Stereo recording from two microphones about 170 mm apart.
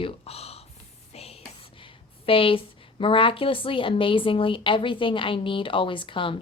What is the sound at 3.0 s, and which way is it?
A woman's voice, 30° left (ahead or behind).